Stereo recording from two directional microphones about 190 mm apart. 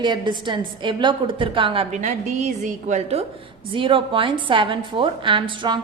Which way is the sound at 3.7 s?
25° right (ahead or behind).